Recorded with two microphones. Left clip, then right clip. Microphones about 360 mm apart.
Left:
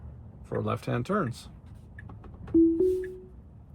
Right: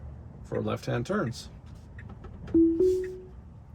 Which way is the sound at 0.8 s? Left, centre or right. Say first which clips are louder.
Left 1 dB; left.